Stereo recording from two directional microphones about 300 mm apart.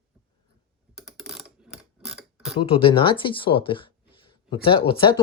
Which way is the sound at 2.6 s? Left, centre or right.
Centre.